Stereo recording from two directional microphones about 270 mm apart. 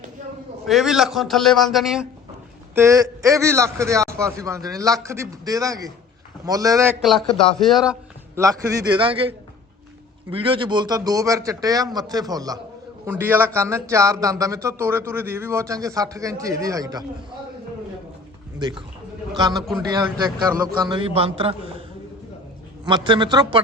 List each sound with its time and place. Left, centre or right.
0.7 s a man's voice: centre
7.0 s a man's voice: centre
8.4 s a man's voice: centre
18.6 s speech: centre
22.9 s speech: centre